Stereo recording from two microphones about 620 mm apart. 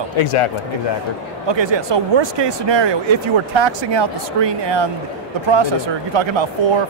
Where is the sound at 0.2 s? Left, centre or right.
Left.